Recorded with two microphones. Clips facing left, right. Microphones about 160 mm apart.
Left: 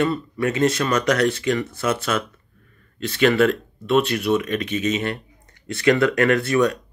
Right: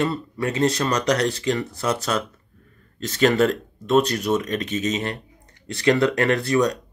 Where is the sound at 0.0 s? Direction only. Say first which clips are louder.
Left 2 dB; 30° right (ahead or behind).